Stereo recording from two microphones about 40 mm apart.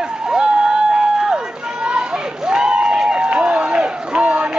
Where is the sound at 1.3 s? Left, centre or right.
Right.